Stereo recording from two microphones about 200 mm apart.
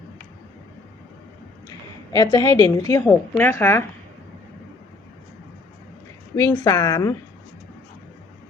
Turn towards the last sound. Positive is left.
turn(degrees=15)  # may be behind; listen again after turning